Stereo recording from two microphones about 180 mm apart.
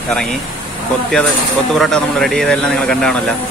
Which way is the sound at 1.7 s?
5° left (ahead or behind).